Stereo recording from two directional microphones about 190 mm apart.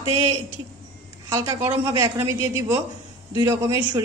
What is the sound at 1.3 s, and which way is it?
A woman's voice, 15° right (ahead or behind).